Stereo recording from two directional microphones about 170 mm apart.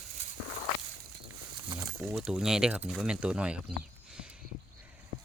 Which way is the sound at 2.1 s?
5° right (ahead or behind).